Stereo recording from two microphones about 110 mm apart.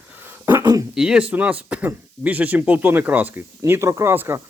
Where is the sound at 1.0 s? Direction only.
10° right (ahead or behind).